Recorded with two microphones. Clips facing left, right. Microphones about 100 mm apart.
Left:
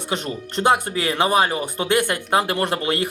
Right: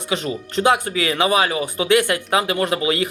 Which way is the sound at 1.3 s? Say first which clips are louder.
Even; 50° left (ahead or behind).